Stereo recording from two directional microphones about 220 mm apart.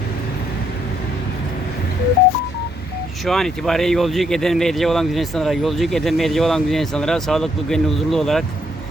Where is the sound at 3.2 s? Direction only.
Centre (ahead or behind).